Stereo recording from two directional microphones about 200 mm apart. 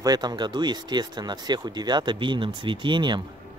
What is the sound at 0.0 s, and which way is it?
Speech, 20° right (ahead or behind).